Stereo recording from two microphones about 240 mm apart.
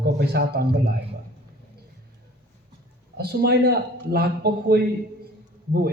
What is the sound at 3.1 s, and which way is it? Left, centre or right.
A man's voice, right.